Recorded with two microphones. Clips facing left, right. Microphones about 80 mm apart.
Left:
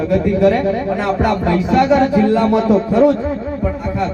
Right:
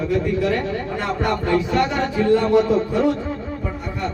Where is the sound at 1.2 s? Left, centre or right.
Left.